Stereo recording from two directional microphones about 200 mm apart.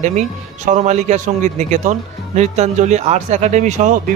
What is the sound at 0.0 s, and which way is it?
A man's voice, 35° right (ahead or behind).